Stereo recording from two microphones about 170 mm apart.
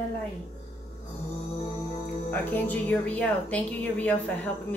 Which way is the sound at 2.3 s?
10° left (ahead or behind).